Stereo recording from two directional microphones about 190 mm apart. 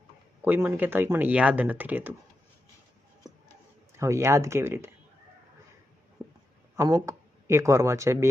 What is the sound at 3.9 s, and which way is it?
Speech, 15° right (ahead or behind).